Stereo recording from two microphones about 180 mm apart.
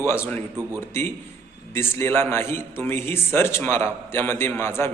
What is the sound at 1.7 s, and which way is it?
A man's voice, 15° left (ahead or behind).